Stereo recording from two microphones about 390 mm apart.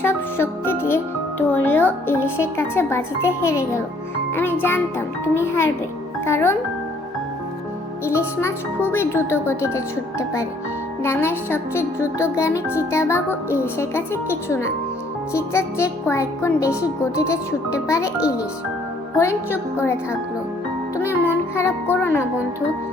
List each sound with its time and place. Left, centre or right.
0.0 s speech: centre
8.4 s speech: centre
19.1 s speech: centre
21.2 s speech: centre